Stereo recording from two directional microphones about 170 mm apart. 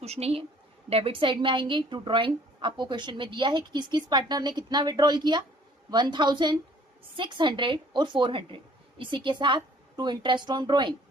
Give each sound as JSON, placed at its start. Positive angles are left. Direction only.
{"t": 0.0, "sound": "a woman's voice", "side_deg": -40}